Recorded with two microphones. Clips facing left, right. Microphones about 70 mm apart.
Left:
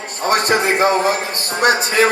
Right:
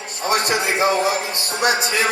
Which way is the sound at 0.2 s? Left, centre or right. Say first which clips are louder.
Left 4 dB; left.